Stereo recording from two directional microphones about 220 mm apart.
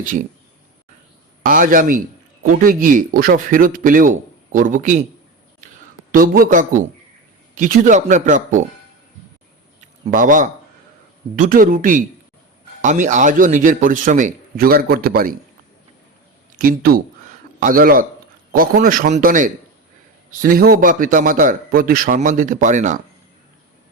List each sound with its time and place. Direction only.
1.5 s speech: 40° right (ahead or behind)
6.1 s speech: 40° right (ahead or behind)
10.1 s speech: 35° right (ahead or behind)
16.6 s speech: 40° right (ahead or behind)